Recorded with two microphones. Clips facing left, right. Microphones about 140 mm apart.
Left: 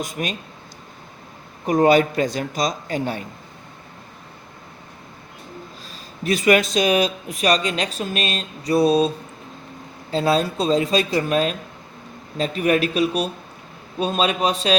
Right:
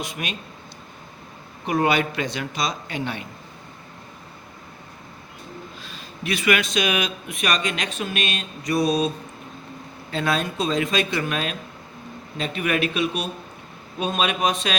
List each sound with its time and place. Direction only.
0.0 s speech: 40° left (ahead or behind)
1.6 s speech: 40° left (ahead or behind)
5.8 s speech: 40° left (ahead or behind)